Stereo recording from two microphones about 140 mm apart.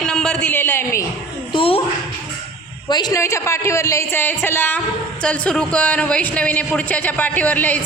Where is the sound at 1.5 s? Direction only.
40° left (ahead or behind).